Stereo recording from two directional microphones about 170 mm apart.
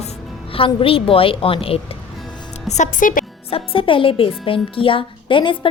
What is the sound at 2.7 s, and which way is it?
Speech, 50° left (ahead or behind).